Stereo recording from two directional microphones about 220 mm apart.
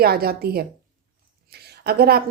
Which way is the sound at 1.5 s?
45° right (ahead or behind).